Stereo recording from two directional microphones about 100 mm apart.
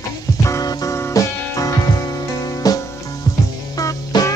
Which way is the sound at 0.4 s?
35° left (ahead or behind).